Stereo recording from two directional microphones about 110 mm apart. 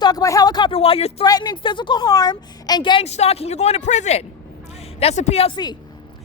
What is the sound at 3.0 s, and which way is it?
Speech, 75° left (ahead or behind).